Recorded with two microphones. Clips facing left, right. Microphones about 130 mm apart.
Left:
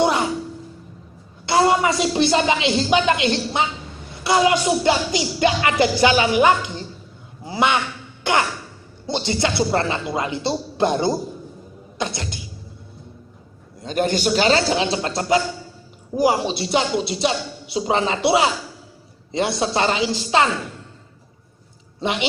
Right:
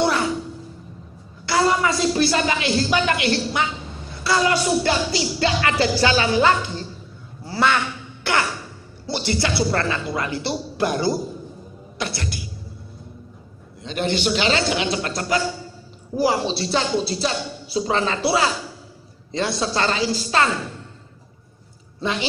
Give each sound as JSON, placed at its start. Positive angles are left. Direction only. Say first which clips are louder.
{"t": 0.0, "sound": "music", "louder": "left 2 dB", "side_deg": 20}
{"t": 1.4, "sound": "a woman's voice", "louder": "left 2 dB", "side_deg": 20}
{"t": 4.2, "sound": "music", "louder": "left 3 dB", "side_deg": 20}
{"t": 7.4, "sound": "a sound", "louder": "left 1 dB", "side_deg": 20}
{"t": 9.0, "sound": "speech", "louder": "left 2 dB", "side_deg": 20}
{"t": 13.8, "sound": "a man's voice", "louder": "left 2 dB", "side_deg": 45}
{"t": 16.2, "sound": "music", "louder": "left 2 dB", "side_deg": 15}
{"t": 17.1, "sound": "speech", "louder": "left 2 dB", "side_deg": 20}
{"t": 19.6, "sound": "speech", "louder": "left 1 dB", "side_deg": 20}